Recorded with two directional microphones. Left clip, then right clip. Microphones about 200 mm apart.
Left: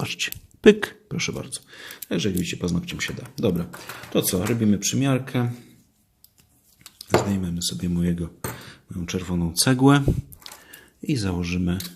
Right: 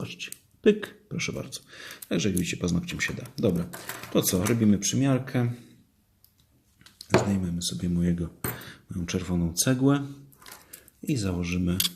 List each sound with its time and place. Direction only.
0.0 s speech: 30° left (ahead or behind); by 5.5 s 10° left (ahead or behind)
7.0 s speech: 10° left (ahead or behind)
9.5 s speech: 20° left (ahead or behind)
11.0 s speech: 20° left (ahead or behind)